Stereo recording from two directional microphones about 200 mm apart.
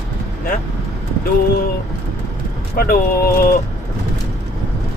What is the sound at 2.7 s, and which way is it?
Speech, 45° left (ahead or behind).